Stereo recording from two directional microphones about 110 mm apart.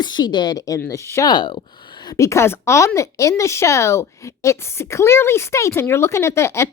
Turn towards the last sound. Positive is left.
turn(degrees=25)  # may be behind; listen again after turning